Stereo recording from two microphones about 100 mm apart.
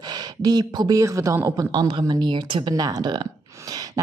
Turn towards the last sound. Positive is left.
turn(degrees=-45)  # may be behind; listen again after turning